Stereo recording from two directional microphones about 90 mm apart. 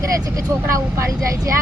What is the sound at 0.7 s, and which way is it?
Speech, 35° right (ahead or behind).